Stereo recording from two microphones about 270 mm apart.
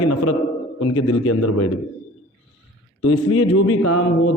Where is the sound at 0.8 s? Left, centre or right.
Left.